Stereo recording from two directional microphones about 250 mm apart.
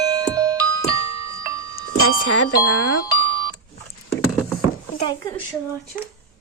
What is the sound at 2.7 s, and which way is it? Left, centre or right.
Speech, left.